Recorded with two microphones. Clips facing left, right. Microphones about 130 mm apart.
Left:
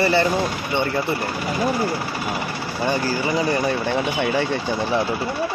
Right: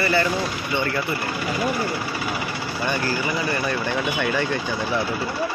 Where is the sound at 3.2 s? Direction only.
30° left (ahead or behind).